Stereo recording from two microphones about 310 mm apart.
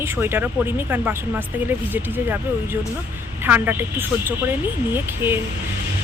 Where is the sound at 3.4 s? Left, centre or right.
Centre.